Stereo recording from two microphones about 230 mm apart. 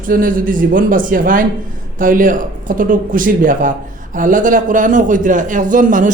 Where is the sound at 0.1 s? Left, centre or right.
Right.